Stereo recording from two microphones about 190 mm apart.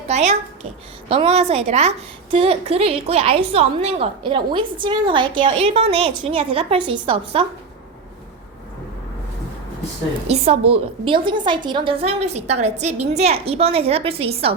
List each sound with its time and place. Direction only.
0.1 s a woman's voice: 35° right (ahead or behind)
10.2 s a woman's voice: 35° right (ahead or behind)